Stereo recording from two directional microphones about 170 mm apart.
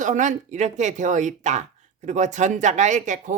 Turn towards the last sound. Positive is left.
turn(degrees=-45)  # may be behind; listen again after turning